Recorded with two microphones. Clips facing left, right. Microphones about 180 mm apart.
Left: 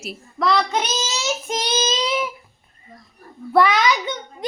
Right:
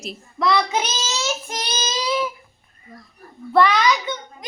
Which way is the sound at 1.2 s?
20° left (ahead or behind).